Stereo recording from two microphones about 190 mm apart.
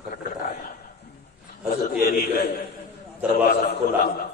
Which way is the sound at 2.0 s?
55° left (ahead or behind).